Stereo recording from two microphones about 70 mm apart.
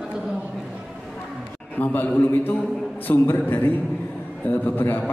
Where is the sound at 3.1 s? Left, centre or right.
Left.